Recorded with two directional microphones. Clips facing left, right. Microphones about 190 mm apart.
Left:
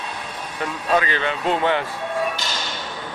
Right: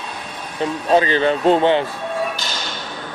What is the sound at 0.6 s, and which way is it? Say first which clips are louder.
Speech: right 5 dB; 25° right (ahead or behind).